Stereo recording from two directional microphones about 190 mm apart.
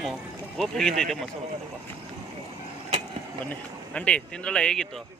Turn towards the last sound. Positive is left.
turn(degrees=5)  # may be behind; listen again after turning